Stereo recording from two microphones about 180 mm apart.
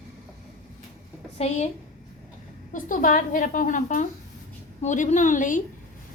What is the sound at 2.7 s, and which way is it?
A woman's voice, 45° left (ahead or behind).